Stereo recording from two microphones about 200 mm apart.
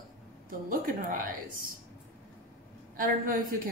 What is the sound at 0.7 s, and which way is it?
Speech, 45° right (ahead or behind).